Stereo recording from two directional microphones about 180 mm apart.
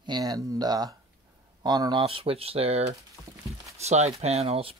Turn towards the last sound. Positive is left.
turn(degrees=-35)  # may be behind; listen again after turning